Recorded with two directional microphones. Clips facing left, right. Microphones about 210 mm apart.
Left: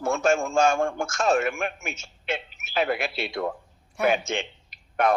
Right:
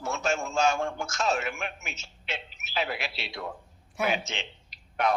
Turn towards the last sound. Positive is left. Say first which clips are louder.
# left 4 dB
turn(degrees=50)  # may be behind; listen again after turning